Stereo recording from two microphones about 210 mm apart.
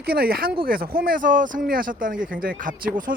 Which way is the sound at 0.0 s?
45° right (ahead or behind).